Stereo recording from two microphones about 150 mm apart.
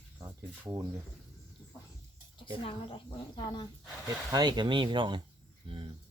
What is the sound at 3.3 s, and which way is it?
Speech, 30° left (ahead or behind).